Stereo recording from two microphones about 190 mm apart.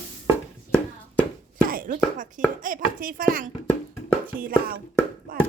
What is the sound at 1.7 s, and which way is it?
Speech, 45° right (ahead or behind).